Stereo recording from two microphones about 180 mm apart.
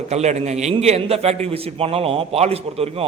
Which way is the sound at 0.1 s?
40° right (ahead or behind).